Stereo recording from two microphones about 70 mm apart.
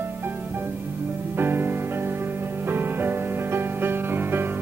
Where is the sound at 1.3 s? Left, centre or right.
Right.